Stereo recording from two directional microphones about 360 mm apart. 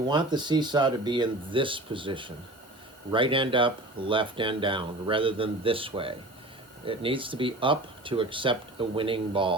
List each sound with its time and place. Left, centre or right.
0.0 s speech: centre